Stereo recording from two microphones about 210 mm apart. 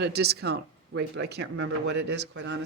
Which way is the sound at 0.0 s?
50° right (ahead or behind).